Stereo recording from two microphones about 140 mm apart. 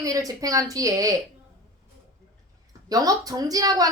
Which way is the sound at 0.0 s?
25° right (ahead or behind).